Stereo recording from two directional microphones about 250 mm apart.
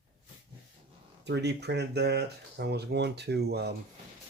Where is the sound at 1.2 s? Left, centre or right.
Right.